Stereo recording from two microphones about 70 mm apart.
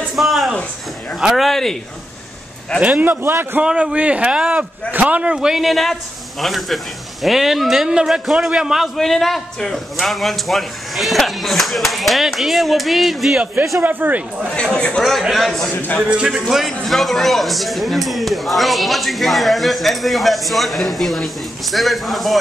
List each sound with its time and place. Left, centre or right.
0.2 s a sound: centre
1.2 s a man's voice: centre
2.8 s a man's voice: right
3.6 s a man's voice: centre
13.8 s a man's voice: right
14.5 s speech: centre
15.0 s a man's voice: centre
15.7 s a man's voice: left
16.0 s a man's voice: centre
16.4 s a man's voice: centre